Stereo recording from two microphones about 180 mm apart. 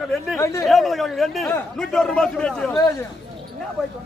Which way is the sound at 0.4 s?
15° left (ahead or behind).